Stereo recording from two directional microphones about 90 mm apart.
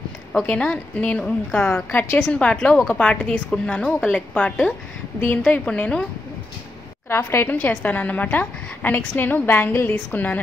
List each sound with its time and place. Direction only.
0.3 s a woman's voice: 10° left (ahead or behind); by 2.2 s 25° left (ahead or behind)
2.3 s a woman's voice: 10° left (ahead or behind)
7.1 s a woman's voice: 25° left (ahead or behind)
7.5 s a woman's voice: 15° left (ahead or behind)